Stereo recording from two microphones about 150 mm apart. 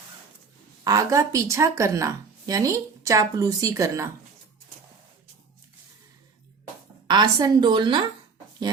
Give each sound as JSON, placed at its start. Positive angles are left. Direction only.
{"t": 0.9, "sound": "speech", "side_deg": -20}
{"t": 7.1, "sound": "speech", "side_deg": -25}